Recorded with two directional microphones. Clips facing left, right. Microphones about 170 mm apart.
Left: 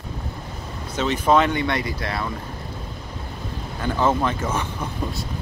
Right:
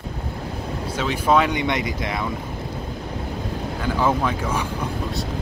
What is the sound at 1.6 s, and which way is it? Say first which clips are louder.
Speech: right 1 dB; 20° right (ahead or behind).